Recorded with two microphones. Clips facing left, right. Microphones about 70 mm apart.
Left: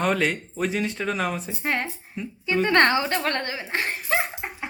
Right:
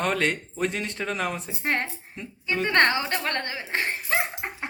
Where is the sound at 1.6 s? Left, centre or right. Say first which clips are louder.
Even; right.